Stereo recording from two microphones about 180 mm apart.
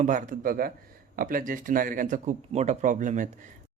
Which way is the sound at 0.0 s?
45° right (ahead or behind).